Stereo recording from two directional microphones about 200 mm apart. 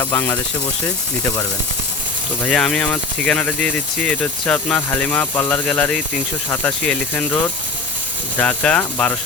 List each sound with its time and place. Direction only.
0.0 s speech: 10° left (ahead or behind)
2.5 s speech: 5° left (ahead or behind)
8.4 s speech: 5° left (ahead or behind)